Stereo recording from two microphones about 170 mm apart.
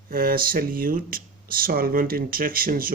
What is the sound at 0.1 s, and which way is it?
Speech, 60° right (ahead or behind).